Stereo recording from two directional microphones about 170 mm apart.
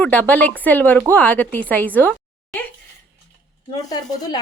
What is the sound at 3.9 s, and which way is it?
Speech, 25° left (ahead or behind).